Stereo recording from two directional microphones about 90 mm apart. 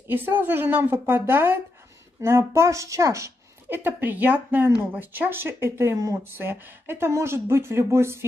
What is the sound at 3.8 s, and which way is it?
Speech, 20° right (ahead or behind).